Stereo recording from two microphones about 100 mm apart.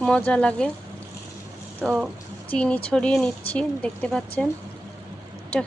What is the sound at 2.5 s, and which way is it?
Speech, 10° left (ahead or behind).